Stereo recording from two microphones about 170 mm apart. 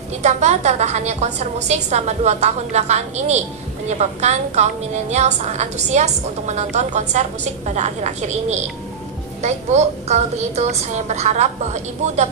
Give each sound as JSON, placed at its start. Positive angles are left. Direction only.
{"t": 0.2, "sound": "a woman's voice", "side_deg": -40}